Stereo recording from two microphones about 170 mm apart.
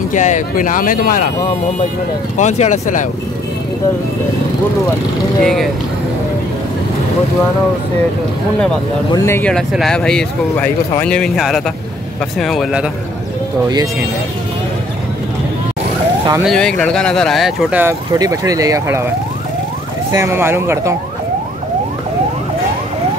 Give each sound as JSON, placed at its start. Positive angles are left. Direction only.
{"t": 0.1, "sound": "speech", "side_deg": 45}
{"t": 2.3, "sound": "speech", "side_deg": 45}
{"t": 5.4, "sound": "speech", "side_deg": 0}
{"t": 9.1, "sound": "speech", "side_deg": 15}
{"t": 16.4, "sound": "speech", "side_deg": 5}
{"t": 18.1, "sound": "speech", "side_deg": -20}
{"t": 20.1, "sound": "speech", "side_deg": -15}